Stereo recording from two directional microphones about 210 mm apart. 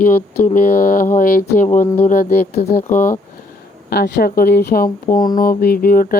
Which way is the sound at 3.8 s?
45° left (ahead or behind).